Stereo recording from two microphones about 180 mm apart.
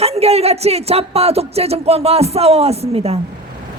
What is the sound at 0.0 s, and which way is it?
Speech, 35° right (ahead or behind).